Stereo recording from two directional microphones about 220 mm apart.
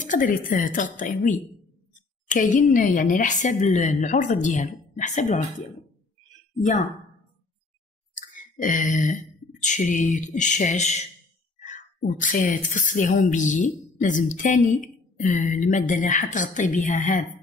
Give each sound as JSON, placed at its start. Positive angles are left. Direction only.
{"t": 0.0, "sound": "speech", "side_deg": 35}
{"t": 8.1, "sound": "a woman's voice", "side_deg": 35}